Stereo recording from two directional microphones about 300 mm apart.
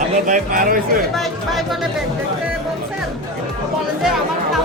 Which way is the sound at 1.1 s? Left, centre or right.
Centre.